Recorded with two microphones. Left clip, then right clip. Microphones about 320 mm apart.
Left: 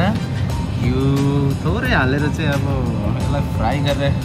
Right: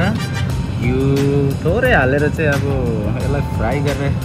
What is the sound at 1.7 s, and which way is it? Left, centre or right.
Speech, centre.